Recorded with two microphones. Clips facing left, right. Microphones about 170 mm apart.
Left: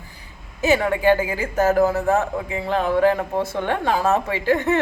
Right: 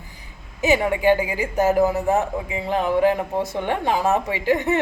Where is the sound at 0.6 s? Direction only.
15° right (ahead or behind).